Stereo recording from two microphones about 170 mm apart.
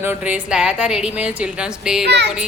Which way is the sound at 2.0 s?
90° right.